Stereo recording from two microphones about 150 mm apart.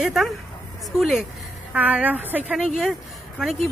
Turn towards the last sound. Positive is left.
turn(degrees=-5)  # may be behind; listen again after turning